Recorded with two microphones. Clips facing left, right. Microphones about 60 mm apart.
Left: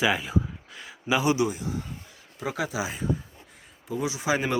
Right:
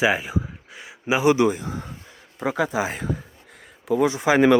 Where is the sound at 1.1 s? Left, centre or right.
Right.